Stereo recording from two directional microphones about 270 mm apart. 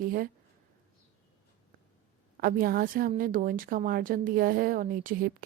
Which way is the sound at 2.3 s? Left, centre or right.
Right.